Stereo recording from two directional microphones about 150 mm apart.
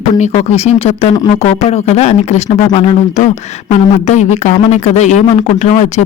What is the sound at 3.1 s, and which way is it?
Speech, 55° left (ahead or behind).